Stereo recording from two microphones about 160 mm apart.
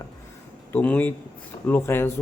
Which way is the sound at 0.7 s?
10° left (ahead or behind).